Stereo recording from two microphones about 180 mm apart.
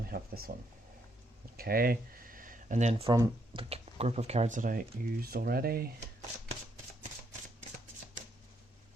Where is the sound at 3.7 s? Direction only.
35° right (ahead or behind); by 5.9 s 55° right (ahead or behind).